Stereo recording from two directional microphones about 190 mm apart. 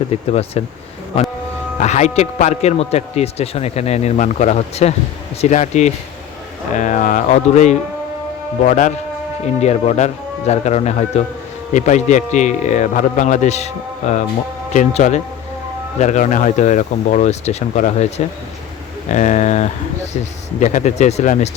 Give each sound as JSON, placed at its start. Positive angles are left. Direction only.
{"t": 0.1, "sound": "speech", "side_deg": 35}
{"t": 1.8, "sound": "speech", "side_deg": 40}
{"t": 14.7, "sound": "speech", "side_deg": 40}
{"t": 19.1, "sound": "speech", "side_deg": 40}